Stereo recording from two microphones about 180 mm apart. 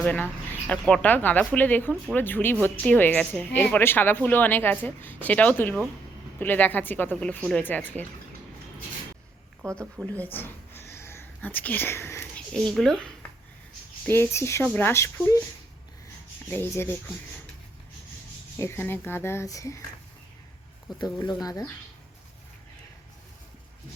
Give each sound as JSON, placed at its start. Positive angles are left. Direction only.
{"t": 0.0, "sound": "a woman's voice", "side_deg": 5}
{"t": 9.6, "sound": "a woman's voice", "side_deg": 5}
{"t": 10.3, "sound": "whispering", "side_deg": 10}
{"t": 14.0, "sound": "a woman's voice", "side_deg": 15}
{"t": 16.5, "sound": "a woman's voice", "side_deg": 15}
{"t": 18.6, "sound": "a woman's voice", "side_deg": 15}
{"t": 20.9, "sound": "speech", "side_deg": 20}